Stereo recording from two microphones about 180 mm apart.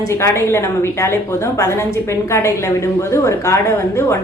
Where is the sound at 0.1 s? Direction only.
15° left (ahead or behind).